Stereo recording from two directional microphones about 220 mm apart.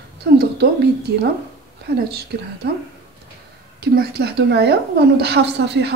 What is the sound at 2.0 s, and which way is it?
Speech, 45° right (ahead or behind).